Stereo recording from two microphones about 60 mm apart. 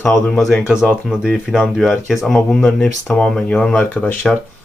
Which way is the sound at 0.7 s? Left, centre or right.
Centre.